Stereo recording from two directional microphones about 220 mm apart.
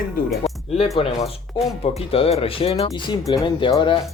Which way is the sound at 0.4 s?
30° left (ahead or behind).